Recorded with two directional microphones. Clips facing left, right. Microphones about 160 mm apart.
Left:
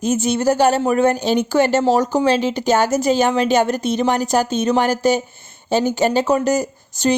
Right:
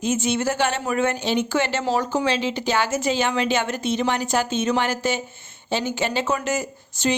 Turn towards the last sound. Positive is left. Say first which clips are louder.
# left 5 dB
turn(degrees=40)  # may be behind; listen again after turning